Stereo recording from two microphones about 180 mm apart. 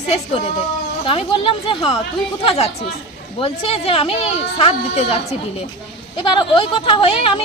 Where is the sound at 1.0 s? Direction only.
30° left (ahead or behind).